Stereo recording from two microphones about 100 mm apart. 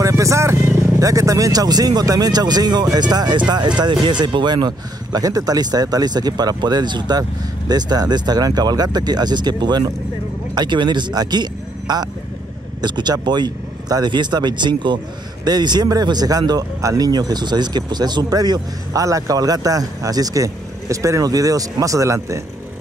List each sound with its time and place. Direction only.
0.0 s speech: 30° right (ahead or behind)